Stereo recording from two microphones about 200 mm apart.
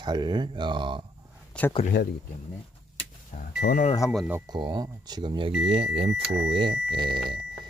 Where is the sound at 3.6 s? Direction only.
50° left (ahead or behind).